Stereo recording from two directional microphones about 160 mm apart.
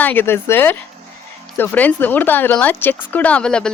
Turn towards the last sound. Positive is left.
turn(degrees=5)  # may be behind; listen again after turning